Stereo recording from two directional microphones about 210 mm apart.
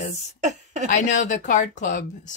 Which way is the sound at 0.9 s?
35° left (ahead or behind).